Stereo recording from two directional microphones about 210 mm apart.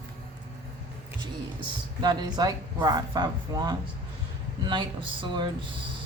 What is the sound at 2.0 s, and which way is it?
Speech, 20° right (ahead or behind).